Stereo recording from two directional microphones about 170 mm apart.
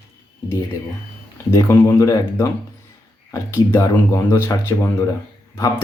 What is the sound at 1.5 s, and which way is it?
Speech, 15° left (ahead or behind).